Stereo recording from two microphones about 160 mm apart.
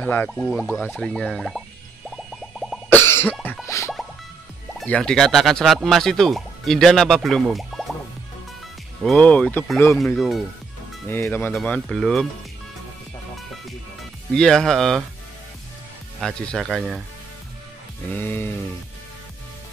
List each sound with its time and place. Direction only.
0.0 s speech: 15° left (ahead or behind)
2.0 s a sound: centre (ahead or behind)
2.9 s cough: 15° left (ahead or behind)
3.6 s music: 20° left (ahead or behind)
4.7 s speech: 5° left (ahead or behind)
9.0 s speech: 10° left (ahead or behind)
9.9 s speech: centre (ahead or behind)
11.1 s speech: 15° left (ahead or behind)
14.3 s speech: 5° left (ahead or behind)
16.2 s speech: centre (ahead or behind)
18.1 s speech: 15° left (ahead or behind)